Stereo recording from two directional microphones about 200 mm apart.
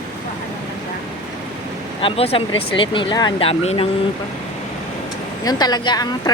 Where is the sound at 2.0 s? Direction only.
30° left (ahead or behind).